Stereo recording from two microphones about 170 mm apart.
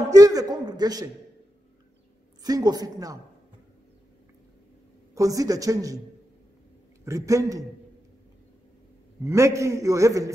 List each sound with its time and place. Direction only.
0.1 s a man's voice: 20° right (ahead or behind)
2.4 s a man's voice: 20° right (ahead or behind)
5.1 s a man's voice: 20° right (ahead or behind)
7.1 s a man's voice: 20° right (ahead or behind)
9.2 s a man's voice: 15° right (ahead or behind)